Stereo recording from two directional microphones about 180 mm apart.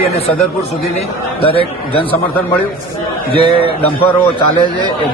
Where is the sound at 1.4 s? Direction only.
30° left (ahead or behind).